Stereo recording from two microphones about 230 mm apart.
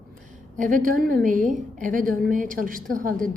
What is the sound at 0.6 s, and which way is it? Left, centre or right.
A woman's voice, right.